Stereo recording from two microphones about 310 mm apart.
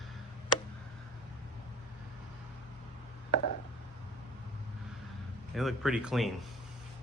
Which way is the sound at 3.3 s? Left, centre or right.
Left.